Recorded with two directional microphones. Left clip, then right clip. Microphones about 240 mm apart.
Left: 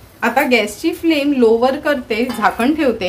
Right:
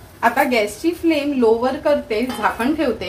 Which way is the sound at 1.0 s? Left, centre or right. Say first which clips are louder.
Left 3 dB; left.